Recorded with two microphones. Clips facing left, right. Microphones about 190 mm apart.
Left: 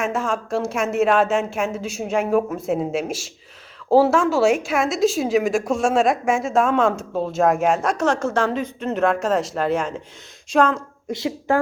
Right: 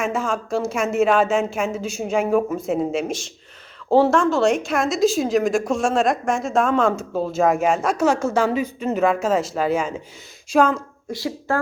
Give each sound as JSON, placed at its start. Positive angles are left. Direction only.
{"t": 0.0, "sound": "speech", "side_deg": 0}
{"t": 11.1, "sound": "speech", "side_deg": 20}